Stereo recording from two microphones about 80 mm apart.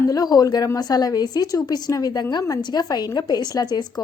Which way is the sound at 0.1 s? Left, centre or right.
Left.